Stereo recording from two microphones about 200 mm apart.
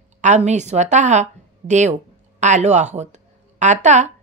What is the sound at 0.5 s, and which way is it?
A woman's voice, 35° right (ahead or behind).